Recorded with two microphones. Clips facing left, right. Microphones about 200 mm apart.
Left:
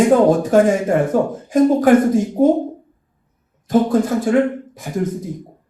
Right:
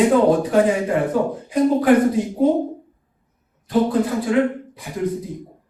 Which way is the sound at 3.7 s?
45° left (ahead or behind).